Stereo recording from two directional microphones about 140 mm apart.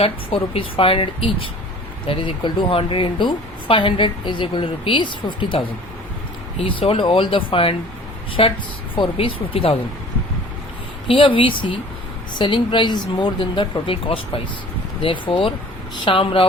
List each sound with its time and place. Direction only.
0.0 s speech: 40° left (ahead or behind)
11.1 s speech: 40° left (ahead or behind)